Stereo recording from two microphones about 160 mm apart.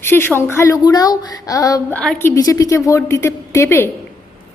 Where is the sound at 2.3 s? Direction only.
20° left (ahead or behind).